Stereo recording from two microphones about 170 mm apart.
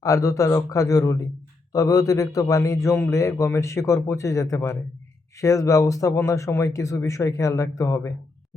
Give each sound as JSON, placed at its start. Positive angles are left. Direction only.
{"t": 0.0, "sound": "a man's voice", "side_deg": 20}